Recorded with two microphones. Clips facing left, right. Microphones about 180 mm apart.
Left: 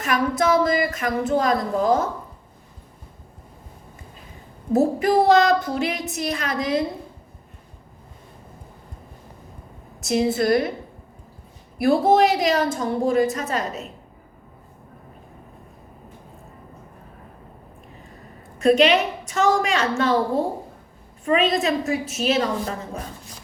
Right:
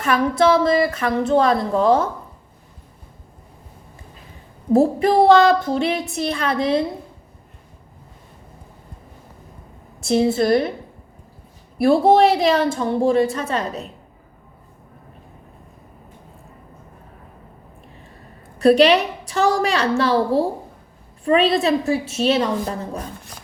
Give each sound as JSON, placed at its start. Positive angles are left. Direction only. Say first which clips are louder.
{"t": 0.0, "sound": "child singing", "louder": "right 4 dB", "side_deg": -30}
{"t": 4.7, "sound": "child singing", "louder": "right 3 dB", "side_deg": -30}
{"t": 10.0, "sound": "child singing", "louder": "right 3 dB", "side_deg": -30}
{"t": 11.8, "sound": "child singing", "louder": "right 3 dB", "side_deg": -30}
{"t": 18.6, "sound": "a woman's voice", "louder": "right 3 dB", "side_deg": -35}